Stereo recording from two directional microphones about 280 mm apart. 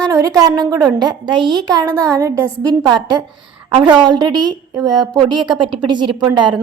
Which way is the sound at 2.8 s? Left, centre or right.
Centre.